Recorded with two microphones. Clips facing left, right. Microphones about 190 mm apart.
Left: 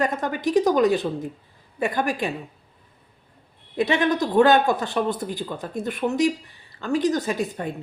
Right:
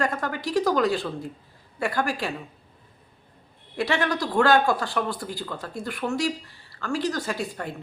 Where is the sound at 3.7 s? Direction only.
20° left (ahead or behind).